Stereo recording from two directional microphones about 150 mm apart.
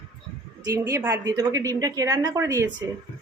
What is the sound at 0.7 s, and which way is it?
A woman's voice, 20° right (ahead or behind).